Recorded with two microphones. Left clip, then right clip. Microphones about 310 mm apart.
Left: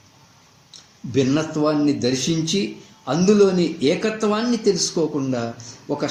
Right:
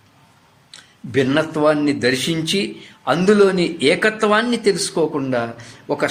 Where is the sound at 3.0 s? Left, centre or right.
Right.